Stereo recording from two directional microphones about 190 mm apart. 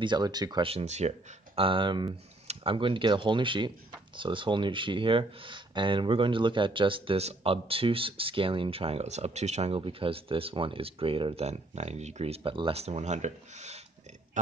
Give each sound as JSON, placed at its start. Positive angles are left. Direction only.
{"t": 0.0, "sound": "speech", "side_deg": -20}